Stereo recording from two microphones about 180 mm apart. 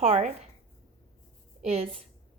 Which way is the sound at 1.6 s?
35° right (ahead or behind).